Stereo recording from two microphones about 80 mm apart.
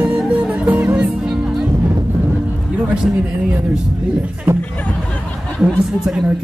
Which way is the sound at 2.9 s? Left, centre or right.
Centre.